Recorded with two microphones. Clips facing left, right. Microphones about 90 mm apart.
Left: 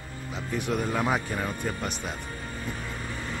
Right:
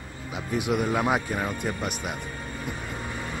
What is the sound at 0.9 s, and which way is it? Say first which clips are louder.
Speech: right 1 dB; 15° right (ahead or behind).